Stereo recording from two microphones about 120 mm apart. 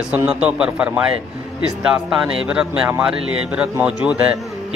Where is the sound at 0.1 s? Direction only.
10° right (ahead or behind).